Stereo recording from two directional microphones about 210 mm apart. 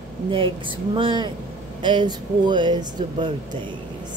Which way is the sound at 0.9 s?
20° right (ahead or behind).